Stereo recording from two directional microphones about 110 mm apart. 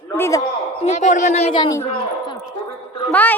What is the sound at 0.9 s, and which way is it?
Speech, 90° left.